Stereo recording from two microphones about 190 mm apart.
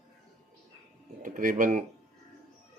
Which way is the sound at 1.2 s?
45° right (ahead or behind).